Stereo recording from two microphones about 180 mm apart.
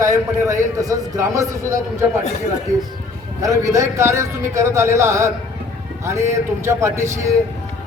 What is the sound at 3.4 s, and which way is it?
A man's voice, 20° right (ahead or behind).